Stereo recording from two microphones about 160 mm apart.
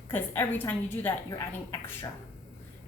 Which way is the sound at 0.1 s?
10° left (ahead or behind).